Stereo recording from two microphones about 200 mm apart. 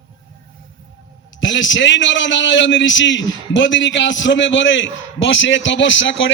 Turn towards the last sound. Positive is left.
turn(degrees=70)  # may be behind; listen again after turning